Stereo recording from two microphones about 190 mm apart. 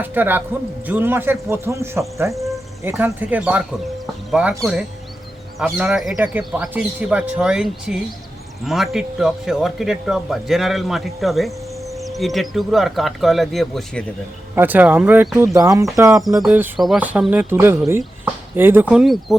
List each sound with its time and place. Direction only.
0.0 s speech: 10° right (ahead or behind)
14.5 s speech: 10° right (ahead or behind)
15.5 s speech: 15° right (ahead or behind); by 19.4 s centre (ahead or behind)